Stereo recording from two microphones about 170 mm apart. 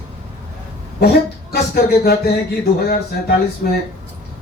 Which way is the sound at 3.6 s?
55° left (ahead or behind).